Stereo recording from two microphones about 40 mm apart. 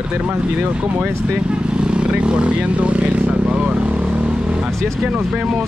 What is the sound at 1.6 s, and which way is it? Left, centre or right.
Vehicle, right.